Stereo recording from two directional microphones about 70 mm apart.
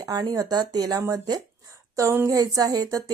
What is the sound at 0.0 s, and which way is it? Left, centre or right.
A woman's voice, right.